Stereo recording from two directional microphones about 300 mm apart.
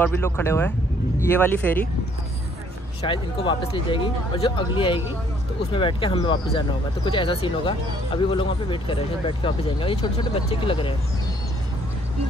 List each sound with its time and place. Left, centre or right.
0.0 s speech: centre
3.0 s speech: centre